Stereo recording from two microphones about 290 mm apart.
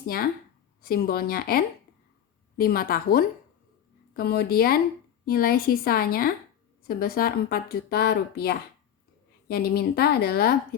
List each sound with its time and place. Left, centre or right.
0.8 s a woman's voice: left